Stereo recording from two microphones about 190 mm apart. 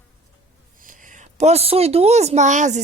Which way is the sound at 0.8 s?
45° right (ahead or behind).